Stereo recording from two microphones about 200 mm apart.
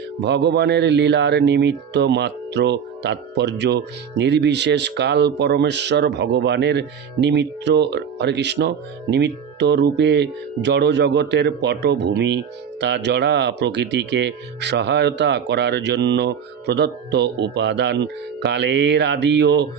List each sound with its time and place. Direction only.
0.2 s speech: 60° right (ahead or behind)